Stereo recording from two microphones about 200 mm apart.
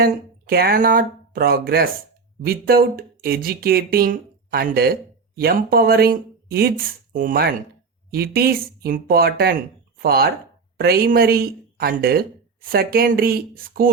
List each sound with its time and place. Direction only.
0.0 s speech: 50° right (ahead or behind)